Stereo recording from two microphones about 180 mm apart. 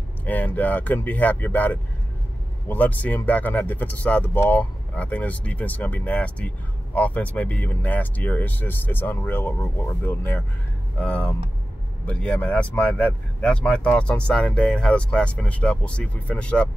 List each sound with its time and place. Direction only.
0.2 s speech: 10° left (ahead or behind)